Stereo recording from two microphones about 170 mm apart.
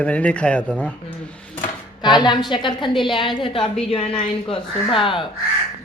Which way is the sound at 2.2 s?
25° left (ahead or behind).